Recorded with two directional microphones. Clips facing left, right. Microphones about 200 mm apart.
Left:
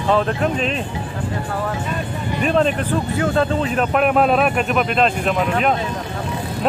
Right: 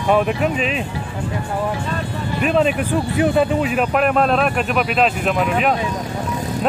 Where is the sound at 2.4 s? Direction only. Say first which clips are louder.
Right 1 dB; 5° right (ahead or behind).